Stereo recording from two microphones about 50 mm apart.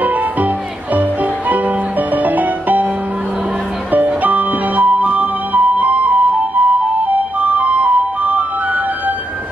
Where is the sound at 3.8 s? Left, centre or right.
Right.